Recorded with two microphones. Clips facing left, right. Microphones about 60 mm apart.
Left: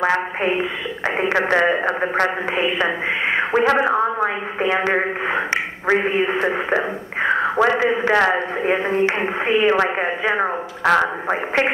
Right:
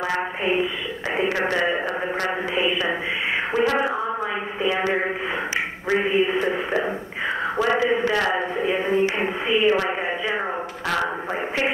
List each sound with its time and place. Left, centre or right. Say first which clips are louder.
0.0 s a woman's voice: left 5 dB; left
7.2 s a sound: left 7 dB; left
7.8 s a man's voice: left 4 dB; left